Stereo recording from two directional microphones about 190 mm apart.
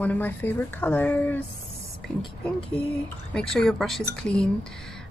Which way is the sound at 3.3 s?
5° left (ahead or behind).